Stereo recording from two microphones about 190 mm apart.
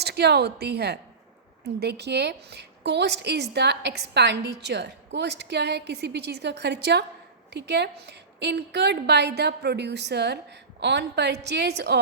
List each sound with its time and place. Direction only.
0.0 s a woman's voice: 60° right (ahead or behind)